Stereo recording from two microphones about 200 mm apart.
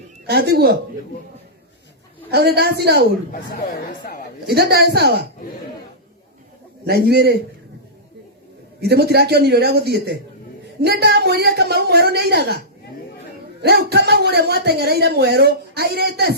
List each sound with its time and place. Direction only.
0.3 s a man's voice: 55° right (ahead or behind)
2.3 s a man's voice: 55° right (ahead or behind)
4.4 s a man's voice: 55° right (ahead or behind)
6.8 s a man's voice: 55° right (ahead or behind)
8.8 s a man's voice: 55° right (ahead or behind)